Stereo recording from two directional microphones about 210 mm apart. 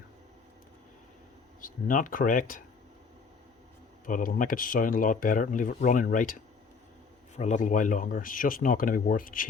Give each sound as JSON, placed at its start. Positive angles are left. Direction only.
{"t": 1.6, "sound": "speech", "side_deg": 40}
{"t": 4.0, "sound": "speech", "side_deg": 40}